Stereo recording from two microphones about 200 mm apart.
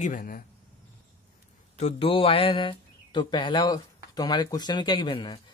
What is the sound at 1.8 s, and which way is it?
Speech, 30° left (ahead or behind).